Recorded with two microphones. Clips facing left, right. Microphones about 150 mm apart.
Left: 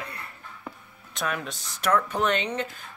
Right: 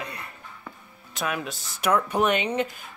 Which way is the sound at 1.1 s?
5° right (ahead or behind).